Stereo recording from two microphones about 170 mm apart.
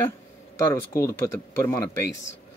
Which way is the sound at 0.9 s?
15° left (ahead or behind).